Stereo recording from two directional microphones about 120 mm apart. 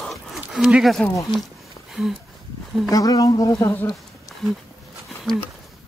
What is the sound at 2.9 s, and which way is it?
Speech, 30° left (ahead or behind).